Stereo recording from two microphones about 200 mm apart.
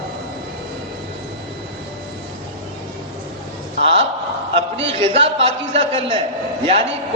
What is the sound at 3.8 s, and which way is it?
A man's voice, 30° right (ahead or behind).